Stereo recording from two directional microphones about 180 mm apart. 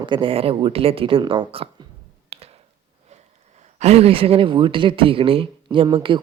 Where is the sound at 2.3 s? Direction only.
35° right (ahead or behind).